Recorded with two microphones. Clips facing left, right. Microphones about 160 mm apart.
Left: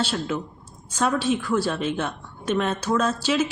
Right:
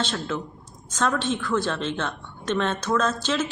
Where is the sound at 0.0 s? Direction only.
10° left (ahead or behind).